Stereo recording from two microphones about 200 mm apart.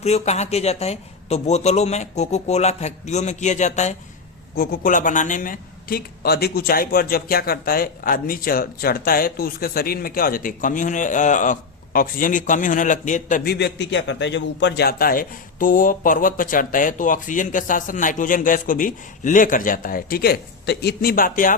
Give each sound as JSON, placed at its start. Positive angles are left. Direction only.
{"t": 0.0, "sound": "speech", "side_deg": 35}
{"t": 4.5, "sound": "a man's voice", "side_deg": 50}